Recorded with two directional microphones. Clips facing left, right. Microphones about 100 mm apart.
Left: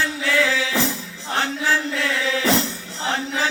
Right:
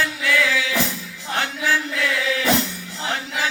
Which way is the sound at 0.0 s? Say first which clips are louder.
Even; 30° left (ahead or behind).